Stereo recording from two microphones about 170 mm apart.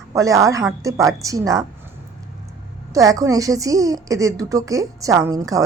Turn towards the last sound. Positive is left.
turn(degrees=-20)  # may be behind; listen again after turning